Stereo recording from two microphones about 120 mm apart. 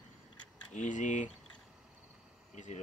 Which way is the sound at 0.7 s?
90° left.